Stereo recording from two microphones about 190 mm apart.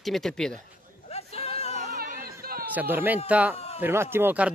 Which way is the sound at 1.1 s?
35° left (ahead or behind).